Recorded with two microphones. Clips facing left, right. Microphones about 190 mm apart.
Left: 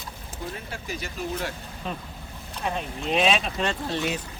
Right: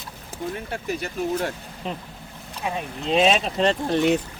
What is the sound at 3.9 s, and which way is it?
Speech, 55° right (ahead or behind).